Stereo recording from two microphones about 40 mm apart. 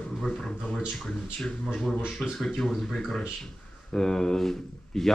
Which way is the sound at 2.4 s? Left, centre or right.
Centre.